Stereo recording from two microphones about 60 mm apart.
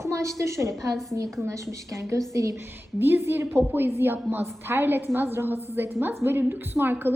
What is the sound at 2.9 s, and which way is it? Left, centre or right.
Speech, right.